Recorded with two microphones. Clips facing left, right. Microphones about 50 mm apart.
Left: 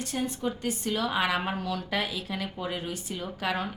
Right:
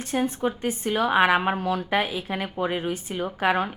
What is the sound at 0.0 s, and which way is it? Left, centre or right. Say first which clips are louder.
A woman's voice: right 6 dB; right.